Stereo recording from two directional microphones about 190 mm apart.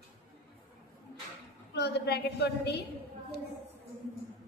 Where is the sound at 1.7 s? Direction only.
60° left (ahead or behind).